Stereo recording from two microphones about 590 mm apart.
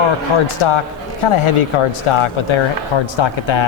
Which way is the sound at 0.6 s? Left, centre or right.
Left.